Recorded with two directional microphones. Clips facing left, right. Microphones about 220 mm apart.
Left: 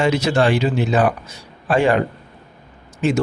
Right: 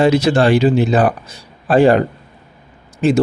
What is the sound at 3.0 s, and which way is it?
Speech, 35° right (ahead or behind).